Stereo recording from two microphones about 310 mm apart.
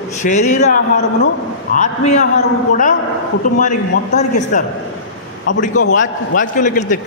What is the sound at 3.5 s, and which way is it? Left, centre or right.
A man's voice, left.